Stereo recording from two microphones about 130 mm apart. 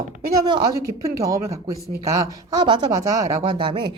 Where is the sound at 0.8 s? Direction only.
25° right (ahead or behind).